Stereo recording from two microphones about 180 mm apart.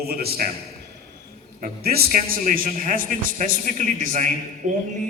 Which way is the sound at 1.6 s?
55° right (ahead or behind).